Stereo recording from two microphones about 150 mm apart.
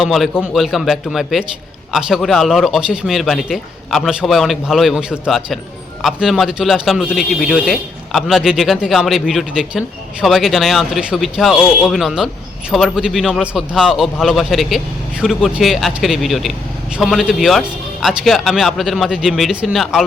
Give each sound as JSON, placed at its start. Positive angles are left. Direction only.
{"t": 0.0, "sound": "speech", "side_deg": 0}